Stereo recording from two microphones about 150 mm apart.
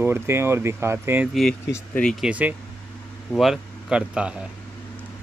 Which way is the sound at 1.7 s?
5° left (ahead or behind).